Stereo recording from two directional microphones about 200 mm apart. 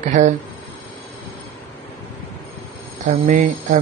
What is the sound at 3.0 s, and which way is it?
Speech, 40° right (ahead or behind).